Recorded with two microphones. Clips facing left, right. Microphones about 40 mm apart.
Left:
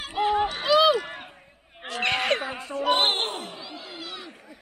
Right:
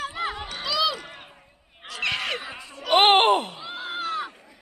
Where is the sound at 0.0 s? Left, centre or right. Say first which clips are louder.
Left 3 dB; right.